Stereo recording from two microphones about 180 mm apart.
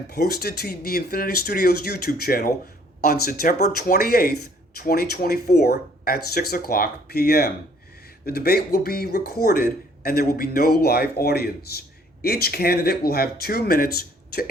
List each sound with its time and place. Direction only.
0.1 s speech: 60° left (ahead or behind)